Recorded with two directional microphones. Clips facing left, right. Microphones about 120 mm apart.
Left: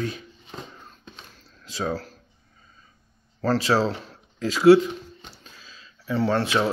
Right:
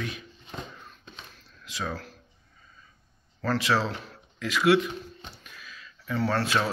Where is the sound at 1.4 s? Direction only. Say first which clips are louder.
Left 6 dB; 35° left (ahead or behind).